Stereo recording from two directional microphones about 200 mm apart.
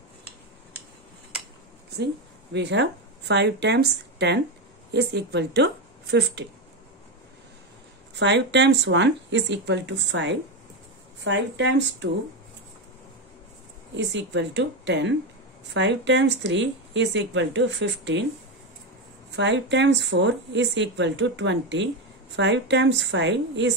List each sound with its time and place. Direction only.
2.5 s speech: 60° right (ahead or behind)
8.2 s speech: 60° right (ahead or behind)
13.9 s speech: 60° right (ahead or behind)
19.3 s speech: 60° right (ahead or behind)